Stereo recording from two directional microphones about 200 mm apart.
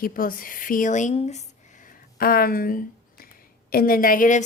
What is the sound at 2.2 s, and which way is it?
A woman's voice, 45° left (ahead or behind).